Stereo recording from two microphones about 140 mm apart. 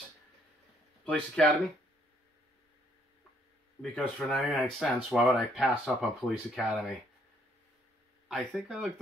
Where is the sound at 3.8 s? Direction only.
5° left (ahead or behind).